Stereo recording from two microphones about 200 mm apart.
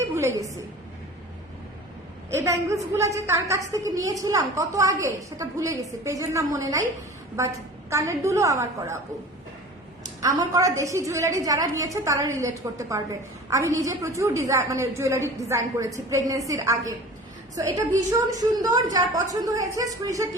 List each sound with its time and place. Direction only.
0.2 s a sound: 15° right (ahead or behind)
2.3 s a woman's voice: 15° right (ahead or behind)
10.2 s a woman's voice: 15° right (ahead or behind)